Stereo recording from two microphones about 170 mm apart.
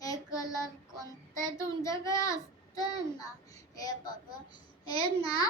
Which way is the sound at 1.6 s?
20° left (ahead or behind).